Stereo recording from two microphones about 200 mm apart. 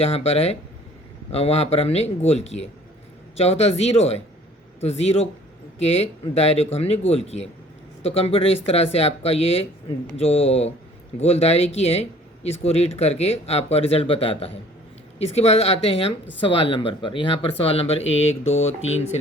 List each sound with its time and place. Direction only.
0.0 s speech: 30° left (ahead or behind)